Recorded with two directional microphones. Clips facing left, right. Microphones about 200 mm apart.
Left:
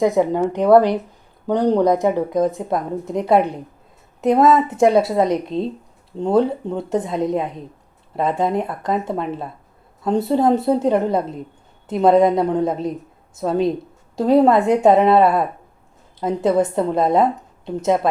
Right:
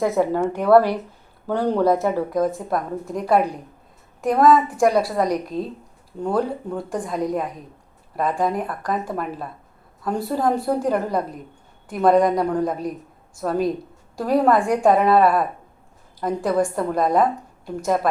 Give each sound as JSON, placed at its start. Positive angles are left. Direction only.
{"t": 0.0, "sound": "speech", "side_deg": 20}